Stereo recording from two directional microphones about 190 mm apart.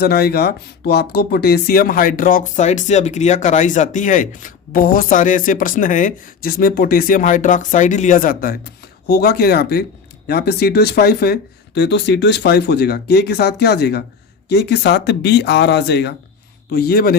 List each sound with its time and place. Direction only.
0.0 s speech: 55° left (ahead or behind)